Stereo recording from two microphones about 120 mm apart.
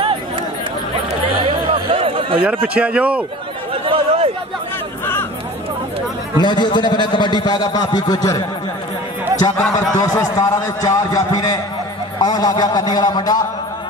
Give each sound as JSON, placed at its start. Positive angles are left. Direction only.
{"t": 1.7, "sound": "chatter", "side_deg": -50}
{"t": 2.4, "sound": "speech", "side_deg": -10}
{"t": 3.7, "sound": "chatter", "side_deg": -50}
{"t": 6.3, "sound": "a man's voice", "side_deg": 40}